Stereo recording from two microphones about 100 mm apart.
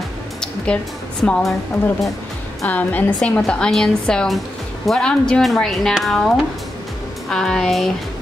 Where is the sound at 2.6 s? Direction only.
15° left (ahead or behind).